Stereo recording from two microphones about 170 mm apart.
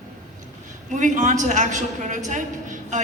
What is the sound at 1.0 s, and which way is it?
A woman's voice, 45° right (ahead or behind).